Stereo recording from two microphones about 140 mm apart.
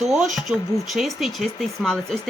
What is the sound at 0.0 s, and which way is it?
Speech, centre (ahead or behind).